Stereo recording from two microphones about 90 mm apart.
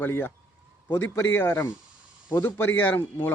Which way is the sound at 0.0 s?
25° left (ahead or behind).